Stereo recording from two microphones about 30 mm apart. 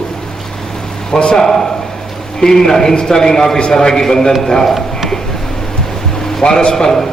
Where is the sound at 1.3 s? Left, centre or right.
Centre.